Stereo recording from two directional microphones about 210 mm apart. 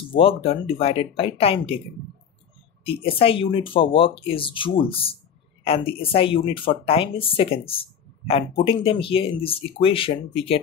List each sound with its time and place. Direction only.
0.1 s speech: 25° left (ahead or behind)
2.8 s speech: 25° left (ahead or behind)